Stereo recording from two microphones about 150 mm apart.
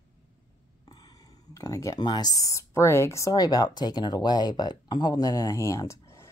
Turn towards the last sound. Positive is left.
turn(degrees=20)  # may be behind; listen again after turning